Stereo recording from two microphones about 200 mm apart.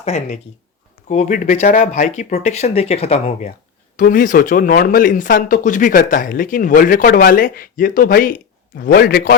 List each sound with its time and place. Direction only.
0.0 s speech: 35° left (ahead or behind)
3.9 s speech: 45° left (ahead or behind)